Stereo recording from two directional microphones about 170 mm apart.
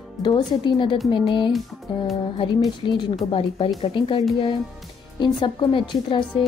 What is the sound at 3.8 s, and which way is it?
A woman's voice, 30° left (ahead or behind).